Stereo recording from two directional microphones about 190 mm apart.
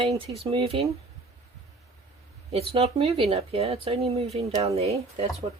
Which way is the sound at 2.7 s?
30° right (ahead or behind).